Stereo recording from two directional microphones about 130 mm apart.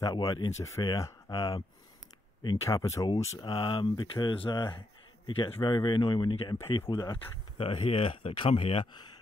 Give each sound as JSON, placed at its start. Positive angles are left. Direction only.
{"t": 0.0, "sound": "speech", "side_deg": 30}
{"t": 3.4, "sound": "speech", "side_deg": 40}